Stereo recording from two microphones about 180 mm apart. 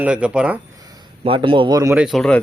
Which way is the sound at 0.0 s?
5° right (ahead or behind).